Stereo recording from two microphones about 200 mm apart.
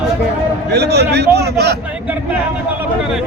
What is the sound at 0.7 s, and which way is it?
Speech, 55° right (ahead or behind).